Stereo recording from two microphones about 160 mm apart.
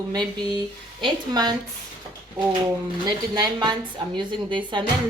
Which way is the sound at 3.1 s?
25° right (ahead or behind).